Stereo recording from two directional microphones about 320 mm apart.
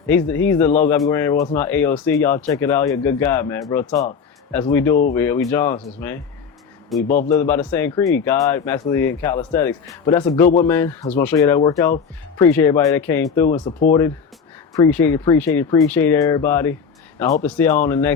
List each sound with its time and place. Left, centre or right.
0.1 s a man's voice: centre
13.7 s speech: left
14.7 s speech: centre